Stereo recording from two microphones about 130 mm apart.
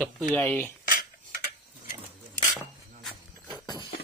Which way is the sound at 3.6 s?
30° left (ahead or behind).